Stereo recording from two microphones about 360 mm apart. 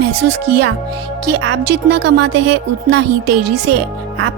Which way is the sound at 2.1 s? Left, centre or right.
Right.